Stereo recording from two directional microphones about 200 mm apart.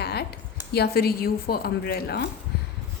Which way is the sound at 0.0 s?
55° left (ahead or behind).